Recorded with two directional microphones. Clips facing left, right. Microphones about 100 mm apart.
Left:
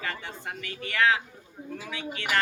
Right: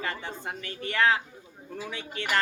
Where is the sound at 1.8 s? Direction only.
20° right (ahead or behind).